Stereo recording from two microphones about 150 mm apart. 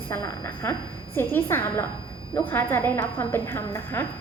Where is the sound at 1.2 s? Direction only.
15° left (ahead or behind).